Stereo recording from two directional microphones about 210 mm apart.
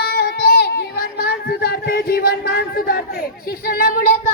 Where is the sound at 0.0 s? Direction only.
50° left (ahead or behind).